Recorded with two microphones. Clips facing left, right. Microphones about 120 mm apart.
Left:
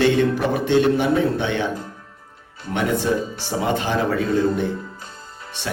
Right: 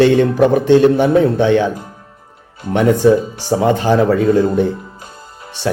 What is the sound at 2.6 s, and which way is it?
Speech, 15° right (ahead or behind).